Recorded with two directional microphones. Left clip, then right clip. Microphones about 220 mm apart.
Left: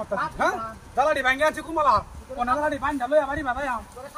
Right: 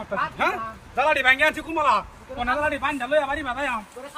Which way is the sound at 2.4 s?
15° right (ahead or behind).